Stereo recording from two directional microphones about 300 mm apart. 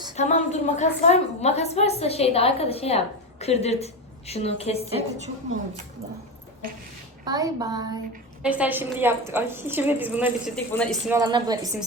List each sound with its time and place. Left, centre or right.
0.2 s a woman's voice: left
7.3 s a woman's voice: centre
11.1 s a woman's voice: centre